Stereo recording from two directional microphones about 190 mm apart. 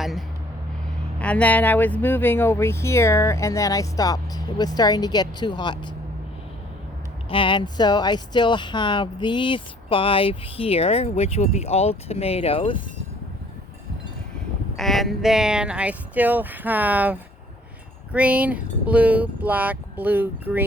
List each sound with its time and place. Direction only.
0.0 s speech: centre (ahead or behind); by 5.9 s 25° left (ahead or behind)
7.3 s speech: 25° left (ahead or behind)
14.8 s speech: centre (ahead or behind)